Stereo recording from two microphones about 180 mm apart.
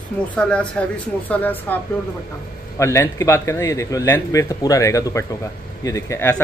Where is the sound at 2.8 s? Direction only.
15° left (ahead or behind).